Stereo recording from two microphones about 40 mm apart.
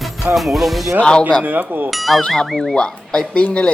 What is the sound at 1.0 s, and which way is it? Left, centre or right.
Speech, left.